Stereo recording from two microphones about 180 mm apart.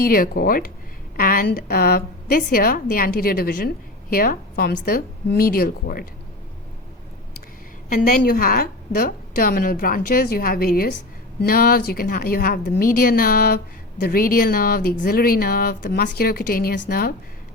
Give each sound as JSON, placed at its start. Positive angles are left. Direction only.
{"t": 0.0, "sound": "a woman's voice", "side_deg": 55}
{"t": 7.9, "sound": "a woman's voice", "side_deg": 50}